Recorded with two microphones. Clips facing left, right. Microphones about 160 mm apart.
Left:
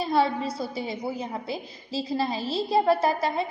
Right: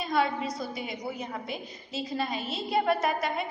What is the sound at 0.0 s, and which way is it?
A woman's voice, 30° left (ahead or behind).